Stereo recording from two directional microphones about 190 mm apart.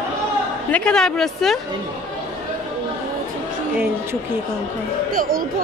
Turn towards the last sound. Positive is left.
turn(degrees=-50)  # may be behind; listen again after turning